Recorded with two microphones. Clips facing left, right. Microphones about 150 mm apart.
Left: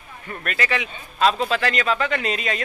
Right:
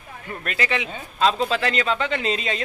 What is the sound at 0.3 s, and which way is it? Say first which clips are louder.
Speech: even; 25° right (ahead or behind).